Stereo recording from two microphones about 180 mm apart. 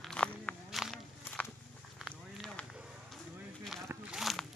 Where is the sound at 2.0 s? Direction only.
Centre (ahead or behind).